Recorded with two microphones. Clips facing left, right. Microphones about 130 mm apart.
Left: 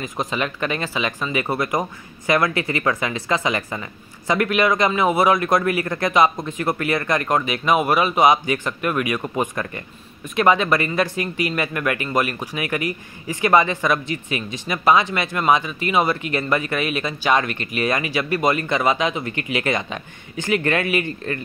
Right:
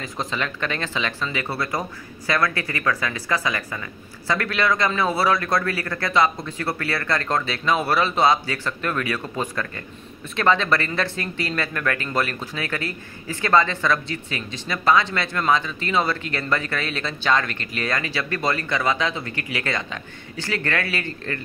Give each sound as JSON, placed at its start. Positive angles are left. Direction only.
{"t": 0.0, "sound": "speech", "side_deg": 15}